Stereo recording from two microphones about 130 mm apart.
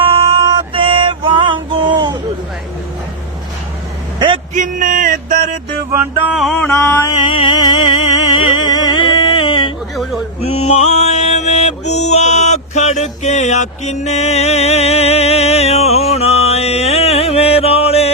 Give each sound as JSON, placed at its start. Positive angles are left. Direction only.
{"t": 0.0, "sound": "music", "side_deg": -45}
{"t": 4.5, "sound": "a sound", "side_deg": -85}
{"t": 5.9, "sound": "music", "side_deg": -15}
{"t": 6.6, "sound": "music", "side_deg": 15}
{"t": 7.2, "sound": "music", "side_deg": 40}
{"t": 9.9, "sound": "a sound", "side_deg": 0}
{"t": 10.4, "sound": "mantra", "side_deg": 55}